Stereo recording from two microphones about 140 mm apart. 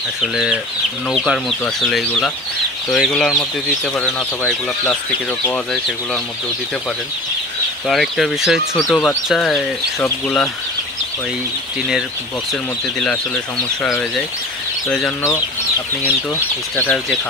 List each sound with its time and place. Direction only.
0.2 s speech: 5° right (ahead or behind)
5.5 s speech: centre (ahead or behind)
7.9 s speech: centre (ahead or behind)
9.9 s speech: 15° left (ahead or behind)
14.9 s speech: 5° left (ahead or behind)
16.7 s speech: 5° left (ahead or behind)